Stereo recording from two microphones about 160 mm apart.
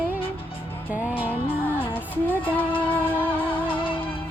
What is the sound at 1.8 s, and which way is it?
Music, 10° left (ahead or behind).